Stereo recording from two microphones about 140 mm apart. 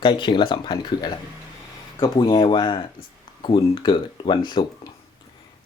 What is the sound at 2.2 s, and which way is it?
Speech, 35° left (ahead or behind).